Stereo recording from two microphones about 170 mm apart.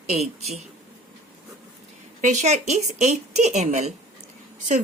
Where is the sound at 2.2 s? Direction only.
45° right (ahead or behind).